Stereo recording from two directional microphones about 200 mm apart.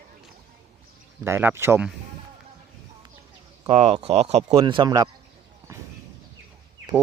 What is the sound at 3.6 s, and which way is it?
Speech, 30° right (ahead or behind).